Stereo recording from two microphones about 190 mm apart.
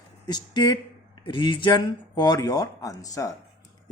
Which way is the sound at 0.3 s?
20° left (ahead or behind).